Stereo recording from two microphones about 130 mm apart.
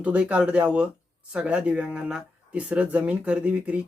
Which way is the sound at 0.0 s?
10° right (ahead or behind).